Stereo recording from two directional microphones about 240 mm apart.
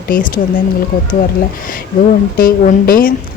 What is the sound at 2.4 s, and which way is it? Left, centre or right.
Speech, left.